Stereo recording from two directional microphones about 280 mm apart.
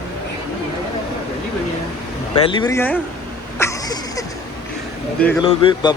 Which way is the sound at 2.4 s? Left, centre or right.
Centre.